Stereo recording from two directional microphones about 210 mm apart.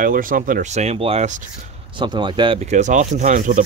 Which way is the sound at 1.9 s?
20° right (ahead or behind).